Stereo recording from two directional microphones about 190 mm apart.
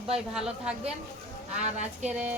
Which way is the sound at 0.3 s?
5° right (ahead or behind).